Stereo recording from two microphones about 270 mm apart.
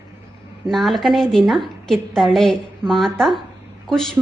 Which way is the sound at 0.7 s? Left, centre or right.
Centre.